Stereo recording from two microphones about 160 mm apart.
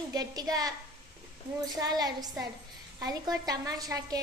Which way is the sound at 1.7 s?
25° right (ahead or behind).